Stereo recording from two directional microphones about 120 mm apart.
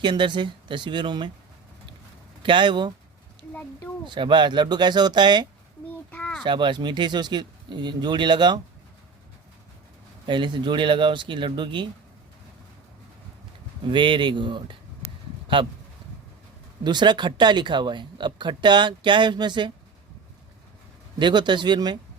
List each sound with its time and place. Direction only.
0.0 s speech: 40° right (ahead or behind)
2.4 s speech: 45° right (ahead or behind)
4.0 s speech: 40° right (ahead or behind)
6.1 s a sound: 10° left (ahead or behind)
6.4 s speech: 40° right (ahead or behind)
10.2 s speech: 40° right (ahead or behind)
13.8 s speech: 40° right (ahead or behind)
16.8 s speech: 40° right (ahead or behind)
21.2 s speech: 40° right (ahead or behind)